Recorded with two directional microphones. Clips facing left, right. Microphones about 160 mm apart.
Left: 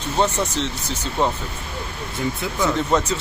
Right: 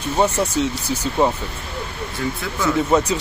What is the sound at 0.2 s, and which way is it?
Speech, 10° right (ahead or behind).